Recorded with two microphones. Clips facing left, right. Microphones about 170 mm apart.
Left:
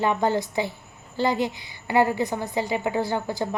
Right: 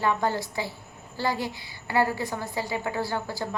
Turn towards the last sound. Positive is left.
turn(degrees=20)  # may be behind; listen again after turning